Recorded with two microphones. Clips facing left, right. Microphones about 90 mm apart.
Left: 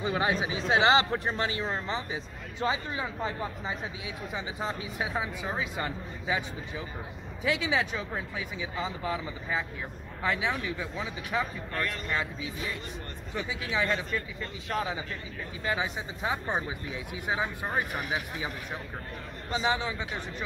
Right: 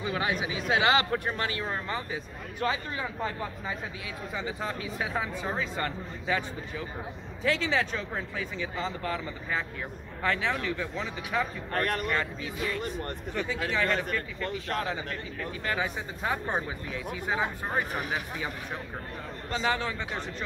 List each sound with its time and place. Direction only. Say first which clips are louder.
0.0 s speech: left 2 dB; 30° left (ahead or behind)
7.4 s speech: right 1 dB; 10° left (ahead or behind)
11.7 s speech: right 7 dB; 60° right (ahead or behind)
12.1 s speech: right 2 dB; 15° left (ahead or behind)
19.5 s speech: even; 15° left (ahead or behind)